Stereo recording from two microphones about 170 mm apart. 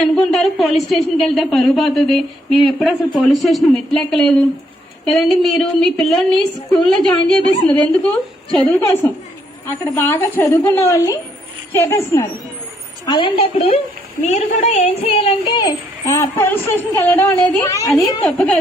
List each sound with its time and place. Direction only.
0.0 s a woman's voice: centre (ahead or behind)
13.1 s a woman's voice: 30° left (ahead or behind)
15.6 s speech: 15° left (ahead or behind)
18.2 s a woman's voice: 5° left (ahead or behind)